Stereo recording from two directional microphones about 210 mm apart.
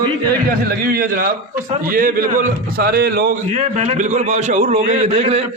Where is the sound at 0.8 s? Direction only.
45° right (ahead or behind).